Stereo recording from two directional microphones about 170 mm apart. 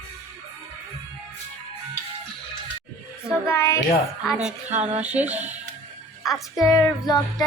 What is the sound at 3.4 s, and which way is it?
Speech, 15° left (ahead or behind).